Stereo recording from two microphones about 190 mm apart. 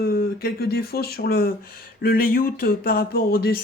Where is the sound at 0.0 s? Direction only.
50° left (ahead or behind).